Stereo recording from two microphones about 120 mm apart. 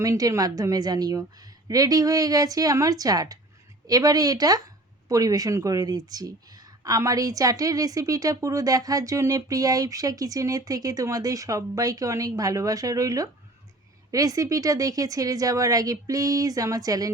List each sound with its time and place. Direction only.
0.0 s a woman's voice: 25° right (ahead or behind)